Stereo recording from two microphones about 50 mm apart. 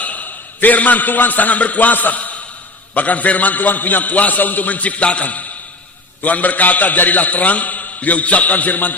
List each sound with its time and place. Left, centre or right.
0.0 s a man's voice: left